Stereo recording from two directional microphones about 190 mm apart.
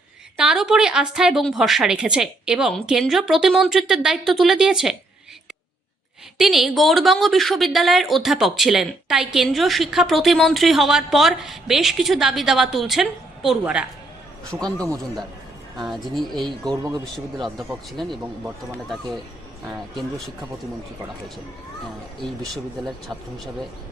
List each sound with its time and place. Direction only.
0.3 s a woman's voice: 5° right (ahead or behind)
6.4 s a woman's voice: centre (ahead or behind)
16.3 s speech: 20° right (ahead or behind)
17.6 s a woman's voice: centre (ahead or behind)